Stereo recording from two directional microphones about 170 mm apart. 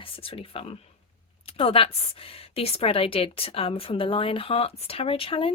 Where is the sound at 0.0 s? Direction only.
35° left (ahead or behind).